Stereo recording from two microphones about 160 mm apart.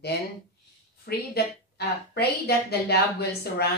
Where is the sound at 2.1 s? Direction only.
90° left.